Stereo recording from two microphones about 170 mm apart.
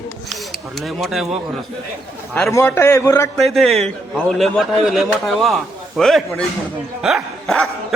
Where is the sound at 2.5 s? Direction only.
15° left (ahead or behind).